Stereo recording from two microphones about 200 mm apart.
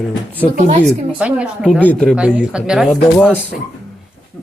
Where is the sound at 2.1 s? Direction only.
5° right (ahead or behind).